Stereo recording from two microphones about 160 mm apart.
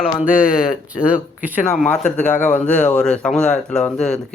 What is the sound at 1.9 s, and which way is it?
A man's voice, 10° left (ahead or behind).